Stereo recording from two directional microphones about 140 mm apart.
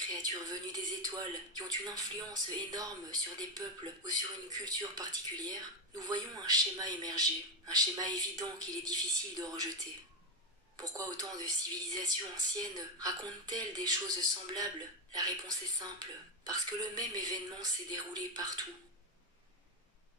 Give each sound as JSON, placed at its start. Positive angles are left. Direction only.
{"t": 0.1, "sound": "speech", "side_deg": -25}
{"t": 10.8, "sound": "speech", "side_deg": -25}